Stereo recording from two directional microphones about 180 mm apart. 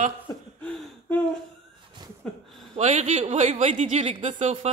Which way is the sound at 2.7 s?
40° right (ahead or behind).